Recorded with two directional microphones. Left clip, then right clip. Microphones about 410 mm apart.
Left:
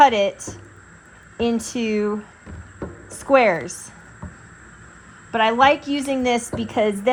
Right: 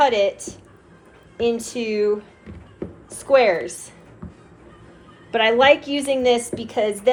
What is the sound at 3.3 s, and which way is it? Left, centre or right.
Speech, centre.